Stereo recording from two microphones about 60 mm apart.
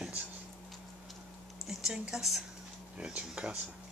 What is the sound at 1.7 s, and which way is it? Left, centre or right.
Speech, centre.